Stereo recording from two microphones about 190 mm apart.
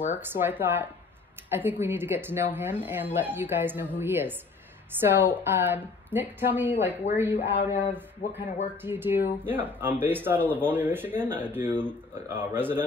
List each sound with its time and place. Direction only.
0.0 s speech: 10° right (ahead or behind)
7.3 s speech: 30° left (ahead or behind)
8.2 s speech: 45° left (ahead or behind)
8.8 s speech: 10° right (ahead or behind)